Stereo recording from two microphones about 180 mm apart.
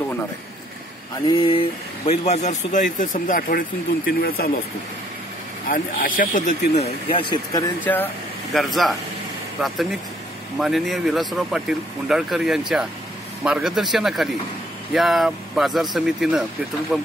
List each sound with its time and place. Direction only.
2.0 s speech: 40° left (ahead or behind); by 4.5 s 55° left (ahead or behind)
5.7 s speech: 50° left (ahead or behind); by 7.6 s 30° left (ahead or behind)
7.8 s speech: 10° left (ahead or behind)